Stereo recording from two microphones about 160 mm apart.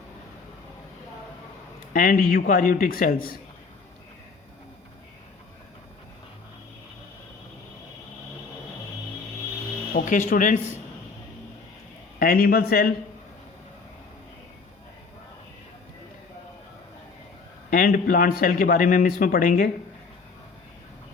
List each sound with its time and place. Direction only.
1.9 s a man's voice: 60° left (ahead or behind)
9.9 s a man's voice: 55° left (ahead or behind)
12.2 s a man's voice: 65° left (ahead or behind)
17.7 s a man's voice: 60° left (ahead or behind)